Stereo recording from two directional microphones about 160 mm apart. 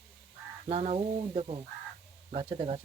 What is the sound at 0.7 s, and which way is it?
Speech, 40° right (ahead or behind).